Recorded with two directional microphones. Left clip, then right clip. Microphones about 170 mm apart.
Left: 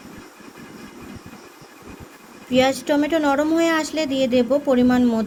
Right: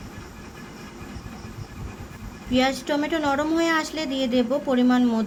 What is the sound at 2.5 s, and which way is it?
A woman's voice, 25° left (ahead or behind).